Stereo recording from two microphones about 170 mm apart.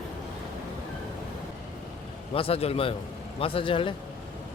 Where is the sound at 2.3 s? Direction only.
35° left (ahead or behind).